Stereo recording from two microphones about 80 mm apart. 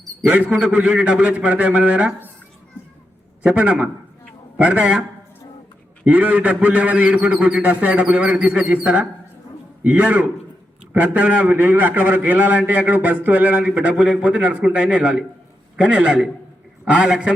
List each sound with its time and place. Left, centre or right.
0.3 s a man's voice: centre
3.4 s a man's voice: centre
6.1 s a man's voice: centre